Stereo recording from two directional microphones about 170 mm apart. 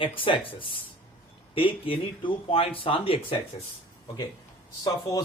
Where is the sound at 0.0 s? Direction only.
30° left (ahead or behind).